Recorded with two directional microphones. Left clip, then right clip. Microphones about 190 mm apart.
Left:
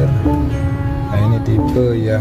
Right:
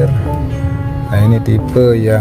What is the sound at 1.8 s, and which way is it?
Speech, 35° right (ahead or behind).